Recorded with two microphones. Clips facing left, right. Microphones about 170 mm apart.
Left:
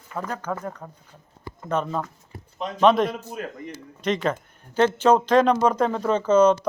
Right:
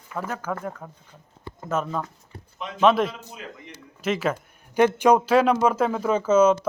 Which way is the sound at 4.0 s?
5° right (ahead or behind).